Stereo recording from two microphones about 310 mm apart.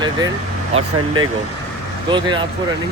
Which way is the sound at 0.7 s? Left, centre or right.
Centre.